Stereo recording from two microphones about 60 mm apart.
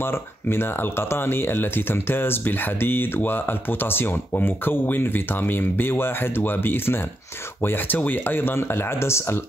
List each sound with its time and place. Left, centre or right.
0.0 s speech: left